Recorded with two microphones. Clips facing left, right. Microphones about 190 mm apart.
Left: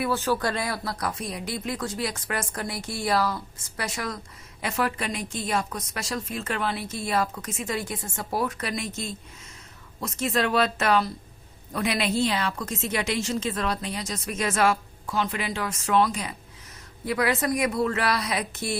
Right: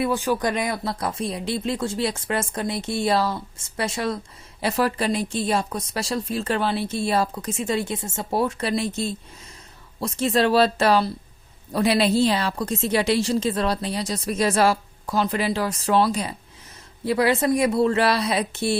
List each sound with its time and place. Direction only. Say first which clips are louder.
0.0 s a woman's voice: right 3 dB; 15° right (ahead or behind)